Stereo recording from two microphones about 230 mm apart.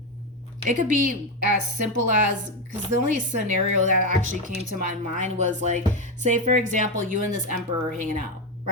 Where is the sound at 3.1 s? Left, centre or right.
Right.